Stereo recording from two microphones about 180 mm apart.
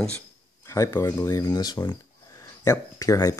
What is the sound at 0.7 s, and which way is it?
Speech, 15° left (ahead or behind).